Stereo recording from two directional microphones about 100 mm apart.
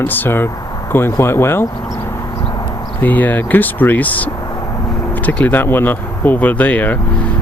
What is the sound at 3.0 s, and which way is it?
Speech, 15° left (ahead or behind).